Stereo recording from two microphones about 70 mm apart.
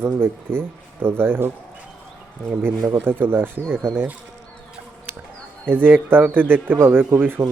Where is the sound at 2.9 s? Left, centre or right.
Right.